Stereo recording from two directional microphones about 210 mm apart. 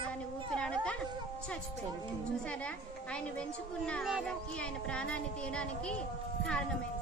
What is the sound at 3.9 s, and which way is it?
Speech, centre (ahead or behind).